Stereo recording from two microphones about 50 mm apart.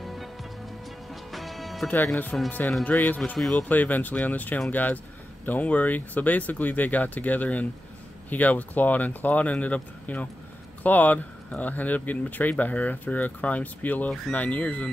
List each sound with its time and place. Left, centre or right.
0.0 s music: centre
1.3 s music: centre
2.3 s speech: left
2.8 s speech: left
3.3 s speech: centre
3.6 s speech: left